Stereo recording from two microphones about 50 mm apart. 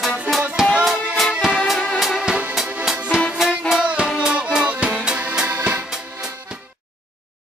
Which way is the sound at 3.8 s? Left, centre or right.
Right.